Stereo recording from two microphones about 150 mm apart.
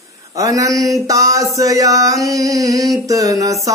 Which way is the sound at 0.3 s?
20° right (ahead or behind).